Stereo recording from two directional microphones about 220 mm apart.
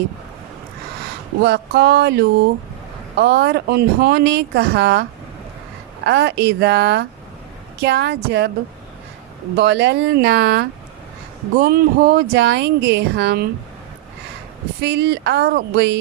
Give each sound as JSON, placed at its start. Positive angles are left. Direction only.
{"t": 1.4, "sound": "speech", "side_deg": -50}
{"t": 6.1, "sound": "speech", "side_deg": -50}
{"t": 9.6, "sound": "speech", "side_deg": -50}
{"t": 14.8, "sound": "speech", "side_deg": -50}